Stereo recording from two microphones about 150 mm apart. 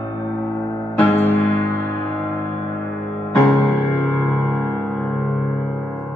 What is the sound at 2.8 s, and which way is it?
Music, 5° left (ahead or behind).